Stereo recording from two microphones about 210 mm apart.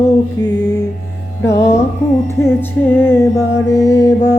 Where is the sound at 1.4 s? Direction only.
15° left (ahead or behind).